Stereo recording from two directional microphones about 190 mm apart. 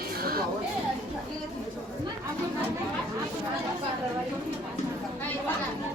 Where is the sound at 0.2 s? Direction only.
50° right (ahead or behind).